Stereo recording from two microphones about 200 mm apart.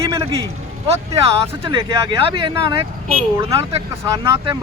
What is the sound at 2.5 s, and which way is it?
Speech, 20° right (ahead or behind).